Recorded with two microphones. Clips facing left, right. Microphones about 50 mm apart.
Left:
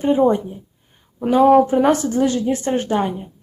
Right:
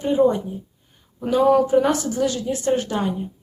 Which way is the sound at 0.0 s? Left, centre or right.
Left.